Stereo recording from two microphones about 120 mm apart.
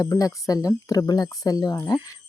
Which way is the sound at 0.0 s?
30° left (ahead or behind).